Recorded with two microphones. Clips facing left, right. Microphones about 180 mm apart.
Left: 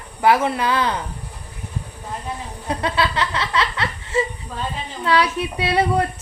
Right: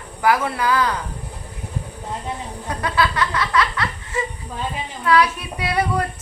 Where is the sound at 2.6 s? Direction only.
25° left (ahead or behind).